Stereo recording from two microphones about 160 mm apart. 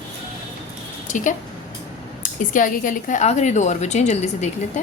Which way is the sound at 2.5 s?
55° left (ahead or behind).